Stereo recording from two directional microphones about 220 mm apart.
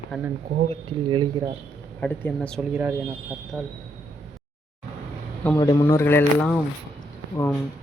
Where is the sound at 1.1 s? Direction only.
20° right (ahead or behind).